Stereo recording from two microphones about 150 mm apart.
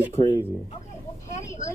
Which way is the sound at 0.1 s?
30° left (ahead or behind).